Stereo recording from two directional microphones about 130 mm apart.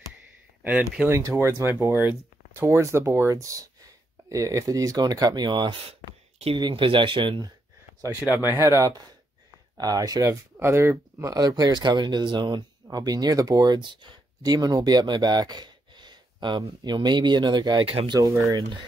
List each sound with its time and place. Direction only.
1.0 s speech: 20° right (ahead or behind)
8.4 s speech: 20° right (ahead or behind)